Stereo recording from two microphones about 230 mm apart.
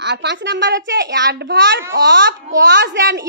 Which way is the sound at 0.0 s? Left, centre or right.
Right.